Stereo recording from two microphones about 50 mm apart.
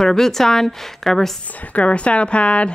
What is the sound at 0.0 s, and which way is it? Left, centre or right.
A woman's voice, centre.